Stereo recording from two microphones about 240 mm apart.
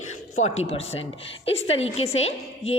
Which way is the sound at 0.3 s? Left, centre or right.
Left.